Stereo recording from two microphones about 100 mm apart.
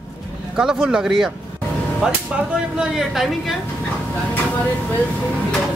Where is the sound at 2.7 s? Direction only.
5° right (ahead or behind).